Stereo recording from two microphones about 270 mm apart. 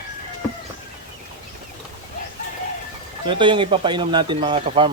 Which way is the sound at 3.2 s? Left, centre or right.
Centre.